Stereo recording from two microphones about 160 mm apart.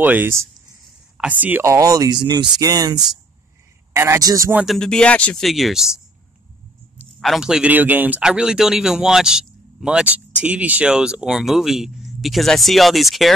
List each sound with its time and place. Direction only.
0.0 s a man's voice: 10° right (ahead or behind)
4.6 s speech: centre (ahead or behind)
7.0 s speech: centre (ahead or behind)